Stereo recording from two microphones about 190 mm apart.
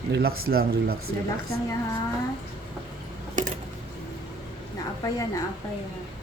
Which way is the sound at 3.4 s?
40° right (ahead or behind).